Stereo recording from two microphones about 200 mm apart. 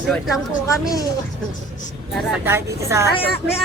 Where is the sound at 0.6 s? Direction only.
20° left (ahead or behind).